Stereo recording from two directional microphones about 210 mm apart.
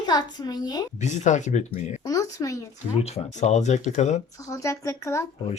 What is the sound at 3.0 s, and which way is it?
Speech, 30° left (ahead or behind).